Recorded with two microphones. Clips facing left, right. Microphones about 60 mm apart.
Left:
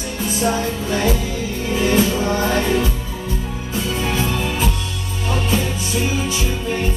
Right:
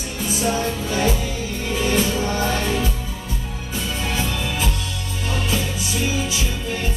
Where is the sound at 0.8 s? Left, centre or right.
Left.